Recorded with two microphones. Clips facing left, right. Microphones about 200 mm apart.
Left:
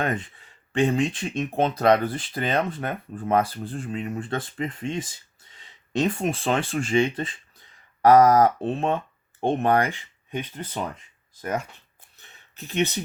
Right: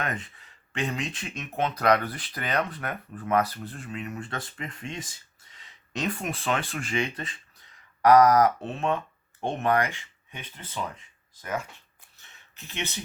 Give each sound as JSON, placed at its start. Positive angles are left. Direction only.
{"t": 0.7, "sound": "speech", "side_deg": 30}
{"t": 12.5, "sound": "speech", "side_deg": 40}